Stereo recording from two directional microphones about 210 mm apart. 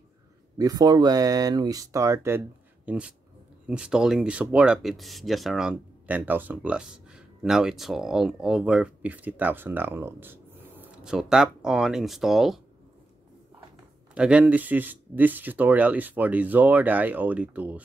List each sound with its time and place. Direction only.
0.6 s speech: 20° right (ahead or behind); by 12.5 s centre (ahead or behind)
14.1 s speech: 5° right (ahead or behind)